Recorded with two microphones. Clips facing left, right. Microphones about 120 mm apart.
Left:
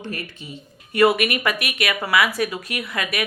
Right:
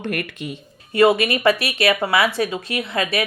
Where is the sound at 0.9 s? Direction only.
25° right (ahead or behind).